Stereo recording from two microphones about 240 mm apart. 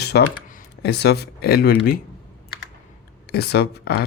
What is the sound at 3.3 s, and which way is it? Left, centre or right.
Speech, left.